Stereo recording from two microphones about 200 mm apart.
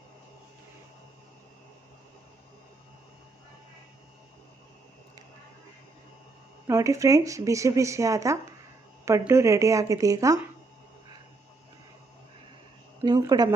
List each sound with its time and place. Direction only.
6.7 s speech: 15° right (ahead or behind)
13.0 s speech: 15° right (ahead or behind)